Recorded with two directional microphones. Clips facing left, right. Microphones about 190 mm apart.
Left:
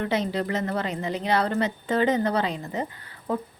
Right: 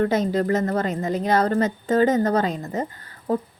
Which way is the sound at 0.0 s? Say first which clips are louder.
Right 5 dB; 45° right (ahead or behind).